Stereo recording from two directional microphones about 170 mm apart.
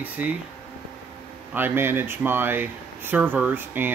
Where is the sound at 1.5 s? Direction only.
10° right (ahead or behind).